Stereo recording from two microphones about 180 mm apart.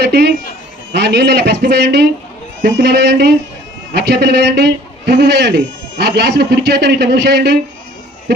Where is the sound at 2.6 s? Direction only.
55° right (ahead or behind); by 7.5 s 70° right (ahead or behind).